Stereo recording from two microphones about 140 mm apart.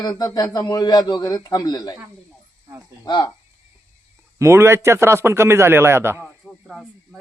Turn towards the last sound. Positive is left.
turn(degrees=-5)  # may be behind; listen again after turning